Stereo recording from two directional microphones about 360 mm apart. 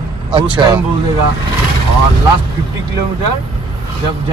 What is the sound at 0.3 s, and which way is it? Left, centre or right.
Speech, centre.